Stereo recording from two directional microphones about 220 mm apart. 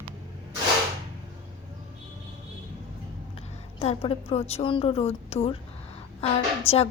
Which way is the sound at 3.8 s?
25° left (ahead or behind).